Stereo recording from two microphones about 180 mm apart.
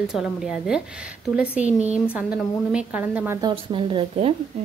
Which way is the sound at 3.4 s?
30° right (ahead or behind).